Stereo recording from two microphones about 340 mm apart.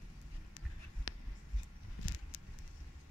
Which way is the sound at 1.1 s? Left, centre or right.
Left.